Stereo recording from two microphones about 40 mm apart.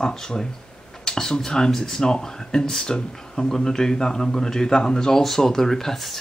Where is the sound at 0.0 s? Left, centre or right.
Centre.